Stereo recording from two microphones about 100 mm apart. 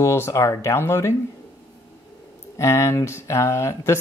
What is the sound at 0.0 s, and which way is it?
Speech, 30° left (ahead or behind).